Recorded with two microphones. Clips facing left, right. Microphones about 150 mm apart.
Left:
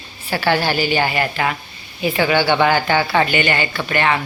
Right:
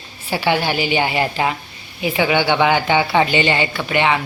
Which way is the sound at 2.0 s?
15° right (ahead or behind).